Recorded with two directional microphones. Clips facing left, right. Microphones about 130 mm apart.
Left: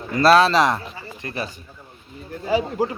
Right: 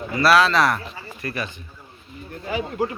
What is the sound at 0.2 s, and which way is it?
Speech, 25° left (ahead or behind).